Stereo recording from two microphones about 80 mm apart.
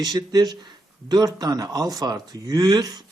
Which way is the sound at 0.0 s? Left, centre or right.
Right.